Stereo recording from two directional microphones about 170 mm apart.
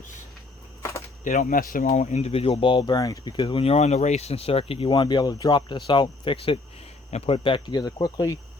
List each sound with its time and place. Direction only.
0.8 s a sound: 15° left (ahead or behind)
1.2 s speech: 50° left (ahead or behind)
1.9 s speech: 40° left (ahead or behind); by 8.4 s 20° left (ahead or behind)